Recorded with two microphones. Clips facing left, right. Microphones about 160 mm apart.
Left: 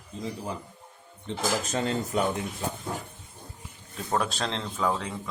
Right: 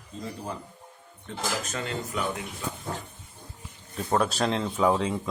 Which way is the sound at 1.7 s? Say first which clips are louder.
Left 5 dB; 35° left (ahead or behind).